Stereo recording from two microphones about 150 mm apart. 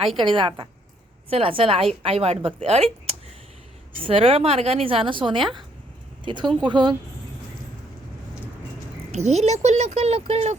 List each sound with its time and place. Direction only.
0.3 s a woman's voice: 35° right (ahead or behind)
9.1 s speech: 50° right (ahead or behind)